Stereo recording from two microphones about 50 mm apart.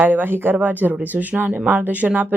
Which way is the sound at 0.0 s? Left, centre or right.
Right.